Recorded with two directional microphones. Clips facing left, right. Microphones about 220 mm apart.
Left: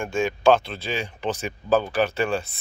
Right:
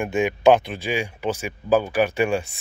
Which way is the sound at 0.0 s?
20° right (ahead or behind).